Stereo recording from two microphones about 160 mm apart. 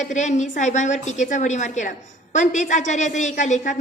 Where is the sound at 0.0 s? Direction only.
50° left (ahead or behind).